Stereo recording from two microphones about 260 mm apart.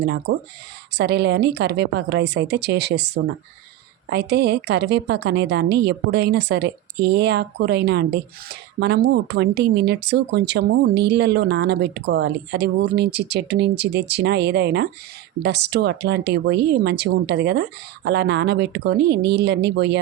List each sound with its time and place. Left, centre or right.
0.0 s speech: right